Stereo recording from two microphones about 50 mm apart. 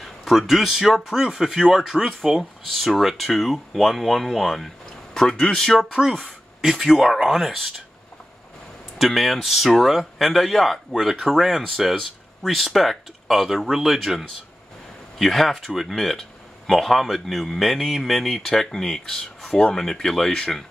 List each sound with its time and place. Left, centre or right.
0.0 s speech: centre
5.8 s speech: centre
8.9 s speech: centre